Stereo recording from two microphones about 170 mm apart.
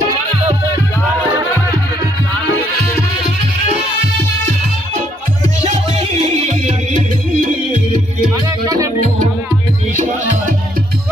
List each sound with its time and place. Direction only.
5.6 s music: 35° right (ahead or behind)
8.6 s music: 20° right (ahead or behind)
9.9 s music: 45° right (ahead or behind)